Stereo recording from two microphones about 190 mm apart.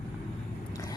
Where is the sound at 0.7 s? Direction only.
20° left (ahead or behind).